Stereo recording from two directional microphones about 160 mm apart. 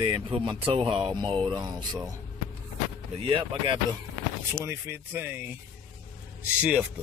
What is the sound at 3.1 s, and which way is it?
Speech, 30° right (ahead or behind).